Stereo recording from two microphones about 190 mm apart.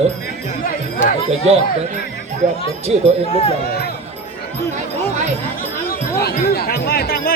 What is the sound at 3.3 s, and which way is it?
Speech, 30° left (ahead or behind).